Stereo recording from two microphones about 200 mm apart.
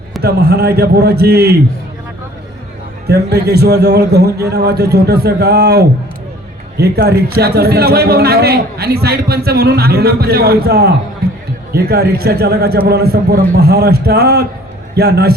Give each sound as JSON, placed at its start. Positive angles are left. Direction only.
{"t": 0.2, "sound": "a man's voice", "side_deg": -55}
{"t": 3.1, "sound": "a man's voice", "side_deg": -55}